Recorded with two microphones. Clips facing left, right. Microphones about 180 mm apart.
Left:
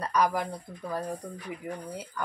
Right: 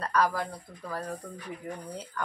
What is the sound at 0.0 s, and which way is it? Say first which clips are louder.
Speech: left 1 dB; 15° left (ahead or behind).